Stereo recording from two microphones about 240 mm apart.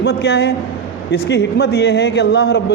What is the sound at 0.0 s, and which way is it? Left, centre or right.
A man's voice, left.